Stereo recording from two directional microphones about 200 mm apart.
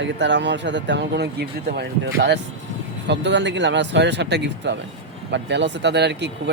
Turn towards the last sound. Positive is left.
turn(degrees=-60)  # may be behind; listen again after turning